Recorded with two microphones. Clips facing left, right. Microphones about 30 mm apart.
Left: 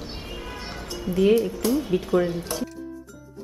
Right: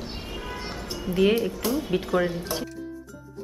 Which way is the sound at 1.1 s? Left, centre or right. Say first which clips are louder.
Left 2 dB; right.